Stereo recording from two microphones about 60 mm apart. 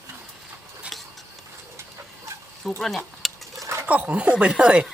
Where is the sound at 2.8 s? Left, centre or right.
Centre.